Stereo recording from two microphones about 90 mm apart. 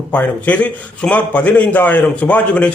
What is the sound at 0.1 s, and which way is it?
A man's voice, 15° left (ahead or behind).